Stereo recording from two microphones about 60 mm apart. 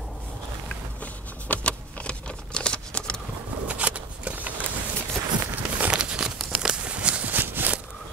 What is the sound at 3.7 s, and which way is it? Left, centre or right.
Shuffling cards, right.